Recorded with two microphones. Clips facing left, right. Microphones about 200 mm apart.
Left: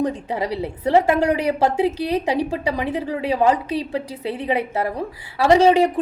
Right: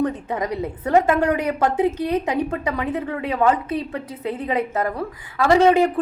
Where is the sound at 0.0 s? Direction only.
30° left (ahead or behind).